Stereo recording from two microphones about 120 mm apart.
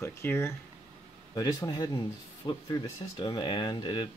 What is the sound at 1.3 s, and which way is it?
Speech, 35° left (ahead or behind).